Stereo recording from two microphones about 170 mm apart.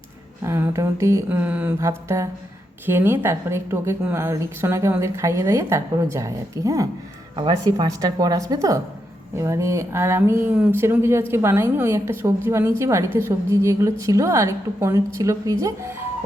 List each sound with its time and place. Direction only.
0.4 s a woman's voice: 15° right (ahead or behind)